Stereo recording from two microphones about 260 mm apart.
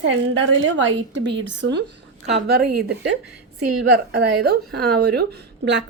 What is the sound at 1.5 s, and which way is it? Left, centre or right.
A woman's voice, right.